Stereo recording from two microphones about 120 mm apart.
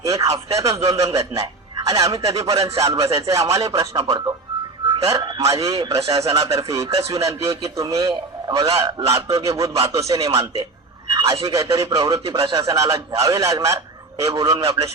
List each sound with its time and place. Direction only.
0.0 s a man's voice: 25° right (ahead or behind)
11.1 s a sound: 30° right (ahead or behind)
11.4 s a man's voice: 30° right (ahead or behind)